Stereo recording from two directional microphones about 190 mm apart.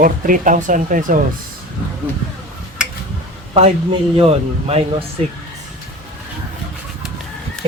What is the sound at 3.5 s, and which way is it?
Speech, 30° right (ahead or behind).